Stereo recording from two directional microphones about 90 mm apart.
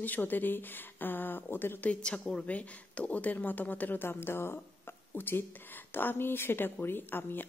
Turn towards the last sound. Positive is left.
turn(degrees=25)  # may be behind; listen again after turning